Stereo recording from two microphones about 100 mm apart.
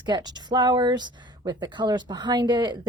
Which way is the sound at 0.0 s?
45° right (ahead or behind).